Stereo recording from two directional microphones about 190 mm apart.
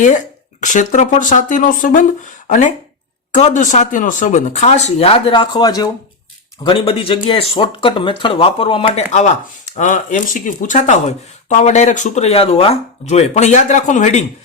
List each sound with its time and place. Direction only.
0.6 s speech: 40° left (ahead or behind)